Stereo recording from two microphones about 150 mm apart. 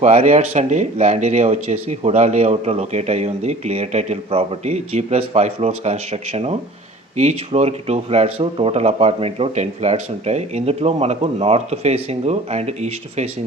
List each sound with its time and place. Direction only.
0.0 s speech: 45° right (ahead or behind)